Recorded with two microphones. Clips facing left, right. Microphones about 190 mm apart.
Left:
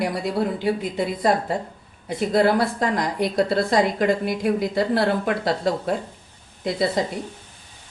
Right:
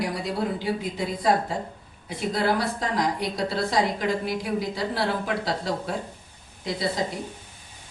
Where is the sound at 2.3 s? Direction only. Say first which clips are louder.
Left 6 dB; 55° left (ahead or behind).